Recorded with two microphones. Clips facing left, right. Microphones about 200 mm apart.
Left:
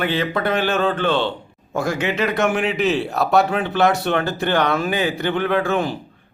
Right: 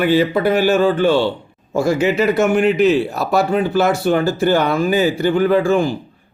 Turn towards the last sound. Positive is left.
turn(degrees=0)  # may be behind; listen again after turning